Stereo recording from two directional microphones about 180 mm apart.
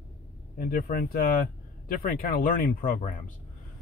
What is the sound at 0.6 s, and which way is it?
Speech, 50° left (ahead or behind).